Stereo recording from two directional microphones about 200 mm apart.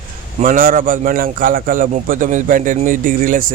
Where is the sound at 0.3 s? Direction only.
40° right (ahead or behind).